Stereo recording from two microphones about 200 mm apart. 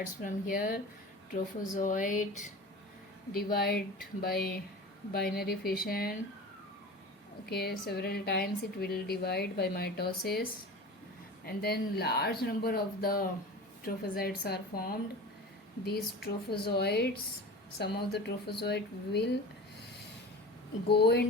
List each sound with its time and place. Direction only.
0.0 s a woman's voice: 40° left (ahead or behind)
7.9 s a woman's voice: 55° left (ahead or behind)
11.4 s a woman's voice: 50° left (ahead or behind)
20.8 s speech: 55° left (ahead or behind)